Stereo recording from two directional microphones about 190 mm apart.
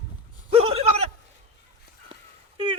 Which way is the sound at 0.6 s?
35° right (ahead or behind).